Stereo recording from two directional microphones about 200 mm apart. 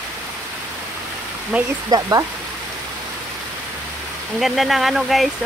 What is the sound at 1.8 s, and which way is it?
Speech, 15° right (ahead or behind).